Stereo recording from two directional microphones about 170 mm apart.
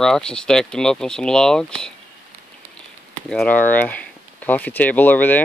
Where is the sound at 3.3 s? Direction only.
5° left (ahead or behind).